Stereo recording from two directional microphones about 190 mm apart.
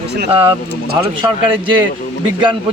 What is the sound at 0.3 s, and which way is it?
Speech, 30° right (ahead or behind).